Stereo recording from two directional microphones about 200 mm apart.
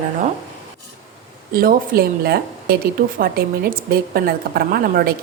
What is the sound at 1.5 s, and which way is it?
A woman's voice, 50° right (ahead or behind).